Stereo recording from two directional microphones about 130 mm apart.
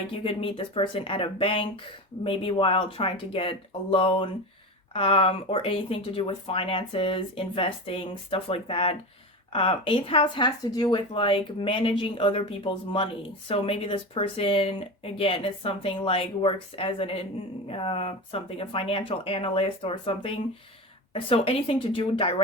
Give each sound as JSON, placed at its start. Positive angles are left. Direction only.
{"t": 0.1, "sound": "speech", "side_deg": 45}